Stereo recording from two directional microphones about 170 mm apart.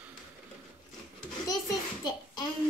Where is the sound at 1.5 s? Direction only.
20° left (ahead or behind).